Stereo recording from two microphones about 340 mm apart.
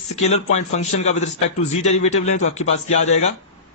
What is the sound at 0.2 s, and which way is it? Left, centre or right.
A man's voice, centre.